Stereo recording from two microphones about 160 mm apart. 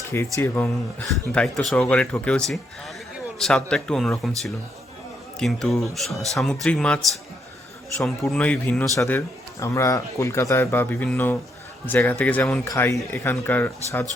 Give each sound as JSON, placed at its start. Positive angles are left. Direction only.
{"t": 0.1, "sound": "a man's voice", "side_deg": 15}
{"t": 8.0, "sound": "a man's voice", "side_deg": 5}